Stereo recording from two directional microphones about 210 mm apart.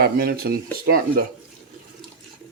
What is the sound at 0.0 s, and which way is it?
Speech, 45° right (ahead or behind).